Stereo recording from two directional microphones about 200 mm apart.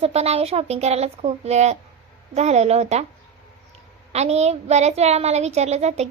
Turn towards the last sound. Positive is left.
turn(degrees=-35)  # may be behind; listen again after turning